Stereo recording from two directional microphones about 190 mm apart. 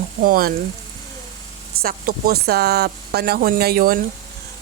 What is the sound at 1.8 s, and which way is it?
Speech, 55° right (ahead or behind).